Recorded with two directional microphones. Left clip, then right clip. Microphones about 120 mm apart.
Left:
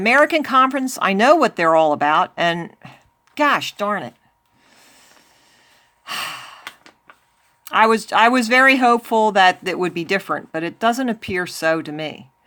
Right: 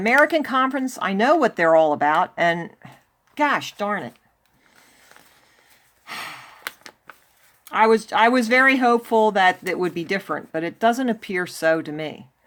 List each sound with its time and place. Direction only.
0.0 s speech: 35° left (ahead or behind)
0.3 s speech: 25° left (ahead or behind); by 1.4 s 40° left (ahead or behind)
1.4 s speech: 25° left (ahead or behind)
6.1 s gasp: 40° left (ahead or behind)
7.6 s speech: 40° left (ahead or behind); by 12.2 s 25° left (ahead or behind)